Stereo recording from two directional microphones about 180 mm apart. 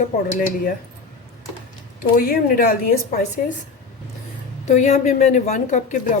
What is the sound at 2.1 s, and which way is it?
Speech, 50° left (ahead or behind).